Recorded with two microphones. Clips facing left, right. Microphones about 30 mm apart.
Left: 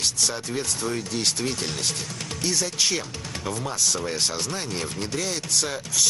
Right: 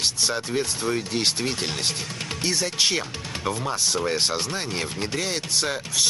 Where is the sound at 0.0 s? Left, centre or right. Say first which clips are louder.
Right 2 dB; right.